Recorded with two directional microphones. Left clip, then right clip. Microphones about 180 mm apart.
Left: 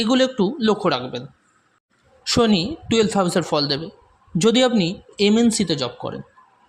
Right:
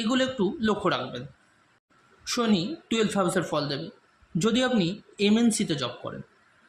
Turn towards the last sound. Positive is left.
turn(degrees=30)  # may be behind; listen again after turning